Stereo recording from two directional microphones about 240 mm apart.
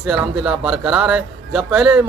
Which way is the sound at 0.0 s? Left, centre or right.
Centre.